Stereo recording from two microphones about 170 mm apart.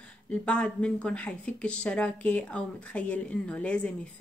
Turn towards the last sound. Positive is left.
turn(degrees=5)  # may be behind; listen again after turning